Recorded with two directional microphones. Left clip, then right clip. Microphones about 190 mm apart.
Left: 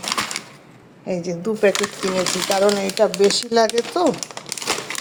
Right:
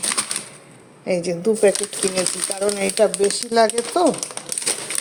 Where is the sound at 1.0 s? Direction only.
10° right (ahead or behind).